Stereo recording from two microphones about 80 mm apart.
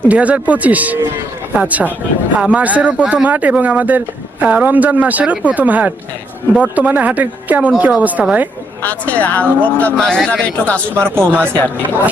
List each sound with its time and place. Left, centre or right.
0.1 s speech: centre
8.8 s speech: centre
11.3 s speech: right